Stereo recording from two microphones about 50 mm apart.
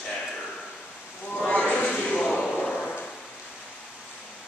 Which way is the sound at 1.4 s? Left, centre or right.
Centre.